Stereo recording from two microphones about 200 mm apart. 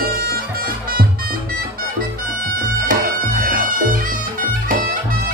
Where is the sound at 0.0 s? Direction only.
50° right (ahead or behind).